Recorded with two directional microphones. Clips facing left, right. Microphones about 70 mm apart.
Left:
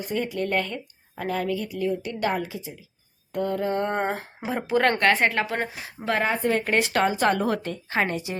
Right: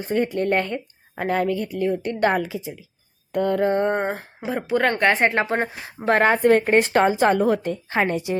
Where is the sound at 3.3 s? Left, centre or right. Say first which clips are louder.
Right 5 dB; right.